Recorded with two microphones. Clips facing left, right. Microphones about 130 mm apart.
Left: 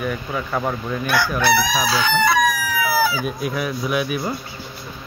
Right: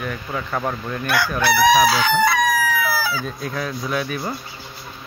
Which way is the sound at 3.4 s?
15° left (ahead or behind).